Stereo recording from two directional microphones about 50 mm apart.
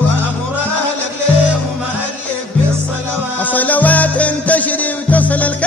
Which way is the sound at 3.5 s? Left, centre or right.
Left.